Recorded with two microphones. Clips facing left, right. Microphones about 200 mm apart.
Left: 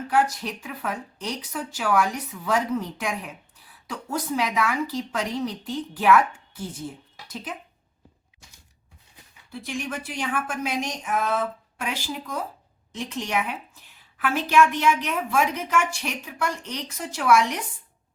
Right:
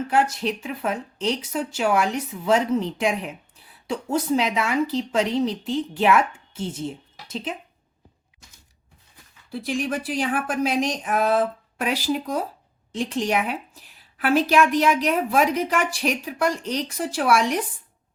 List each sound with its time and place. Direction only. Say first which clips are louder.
0.1 s speech: even; 25° right (ahead or behind)
9.5 s a woman's voice: right 6 dB; 35° right (ahead or behind)